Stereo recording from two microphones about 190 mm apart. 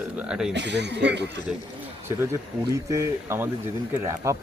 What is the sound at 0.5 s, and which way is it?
Speech, 65° right (ahead or behind).